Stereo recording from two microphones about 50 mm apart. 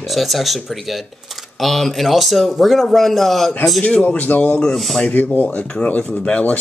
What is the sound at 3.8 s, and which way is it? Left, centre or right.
Speech, left.